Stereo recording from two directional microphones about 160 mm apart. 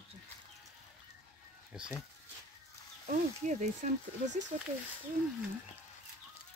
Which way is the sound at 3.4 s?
50° right (ahead or behind).